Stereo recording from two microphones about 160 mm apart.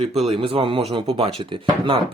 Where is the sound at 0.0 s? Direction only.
40° right (ahead or behind).